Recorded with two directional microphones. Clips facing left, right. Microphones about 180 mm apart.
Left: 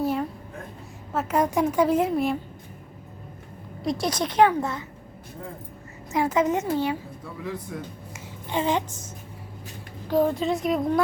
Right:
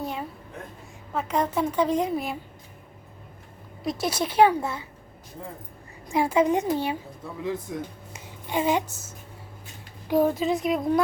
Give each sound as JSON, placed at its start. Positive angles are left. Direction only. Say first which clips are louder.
{"t": 0.0, "sound": "a sound", "louder": "left 7 dB", "side_deg": 0}
{"t": 1.1, "sound": "a woman's voice", "louder": "left 2 dB", "side_deg": 5}
{"t": 3.8, "sound": "a woman's voice", "louder": "left 1 dB", "side_deg": -5}
{"t": 6.1, "sound": "a woman's voice", "louder": "right 1 dB", "side_deg": -10}
{"t": 8.4, "sound": "a woman's voice", "louder": "right 1 dB", "side_deg": -10}